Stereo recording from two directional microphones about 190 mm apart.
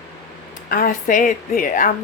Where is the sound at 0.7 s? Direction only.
45° left (ahead or behind).